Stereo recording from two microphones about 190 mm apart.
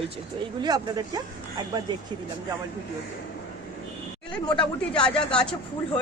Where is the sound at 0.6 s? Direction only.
20° right (ahead or behind).